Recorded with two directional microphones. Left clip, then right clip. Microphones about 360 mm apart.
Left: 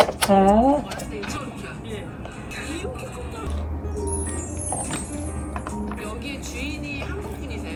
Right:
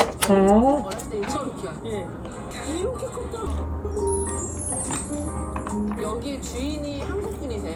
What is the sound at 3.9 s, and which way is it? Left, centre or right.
Music, centre.